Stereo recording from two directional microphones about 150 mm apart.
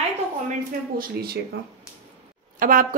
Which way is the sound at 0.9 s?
90° right.